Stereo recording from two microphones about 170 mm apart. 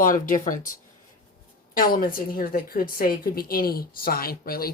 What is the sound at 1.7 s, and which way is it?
A woman's voice, 60° left (ahead or behind).